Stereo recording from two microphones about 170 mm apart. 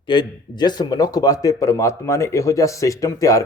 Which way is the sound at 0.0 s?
25° left (ahead or behind).